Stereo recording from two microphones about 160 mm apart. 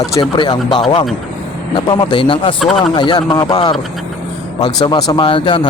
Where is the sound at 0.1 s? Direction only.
25° left (ahead or behind).